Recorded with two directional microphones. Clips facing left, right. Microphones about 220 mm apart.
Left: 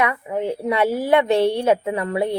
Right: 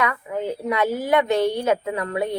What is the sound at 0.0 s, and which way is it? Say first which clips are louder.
A woman's voice: left 3 dB; 25° left (ahead or behind).